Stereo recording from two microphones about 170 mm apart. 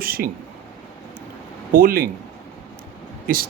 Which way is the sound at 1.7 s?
60° right (ahead or behind).